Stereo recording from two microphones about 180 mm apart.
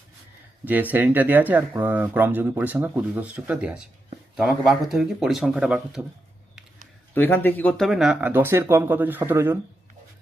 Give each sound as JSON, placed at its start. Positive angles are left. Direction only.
{"t": 0.6, "sound": "speech", "side_deg": -10}
{"t": 7.1, "sound": "speech", "side_deg": 10}